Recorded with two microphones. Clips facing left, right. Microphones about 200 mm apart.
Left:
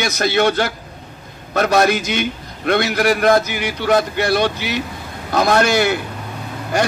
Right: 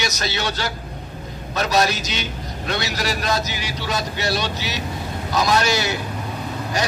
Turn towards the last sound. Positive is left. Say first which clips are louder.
# left 5 dB
turn(degrees=55)  # may be behind; listen again after turning